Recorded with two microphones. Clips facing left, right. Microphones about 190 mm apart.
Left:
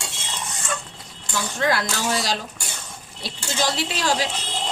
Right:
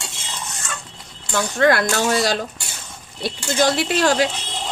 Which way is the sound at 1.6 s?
55° right (ahead or behind).